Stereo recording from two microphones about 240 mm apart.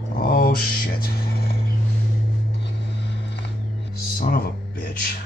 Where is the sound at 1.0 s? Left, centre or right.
Left.